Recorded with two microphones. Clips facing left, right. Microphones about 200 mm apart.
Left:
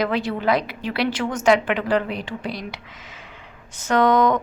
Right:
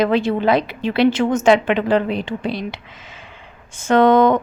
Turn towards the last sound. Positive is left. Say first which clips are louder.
# right 5 dB
turn(degrees=-25)  # may be behind; listen again after turning